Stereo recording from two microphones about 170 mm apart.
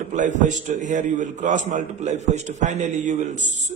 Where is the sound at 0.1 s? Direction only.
45° right (ahead or behind).